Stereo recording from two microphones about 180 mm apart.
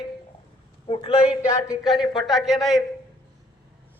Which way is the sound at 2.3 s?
Centre (ahead or behind).